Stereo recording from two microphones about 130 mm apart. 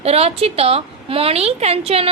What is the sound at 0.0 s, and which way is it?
A woman's voice, 50° right (ahead or behind).